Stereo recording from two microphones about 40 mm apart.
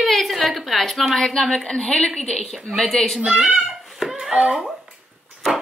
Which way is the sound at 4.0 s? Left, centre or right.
Centre.